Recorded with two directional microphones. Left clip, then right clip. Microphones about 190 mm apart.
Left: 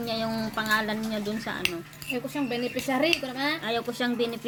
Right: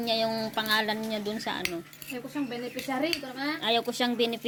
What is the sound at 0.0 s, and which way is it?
A woman's voice, 20° right (ahead or behind).